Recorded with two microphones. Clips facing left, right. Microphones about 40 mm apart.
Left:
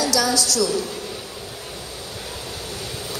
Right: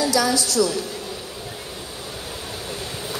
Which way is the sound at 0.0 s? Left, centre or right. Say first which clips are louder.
Right 1 dB; right.